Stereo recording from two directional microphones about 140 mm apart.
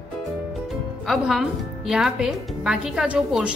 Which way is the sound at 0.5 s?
Centre (ahead or behind).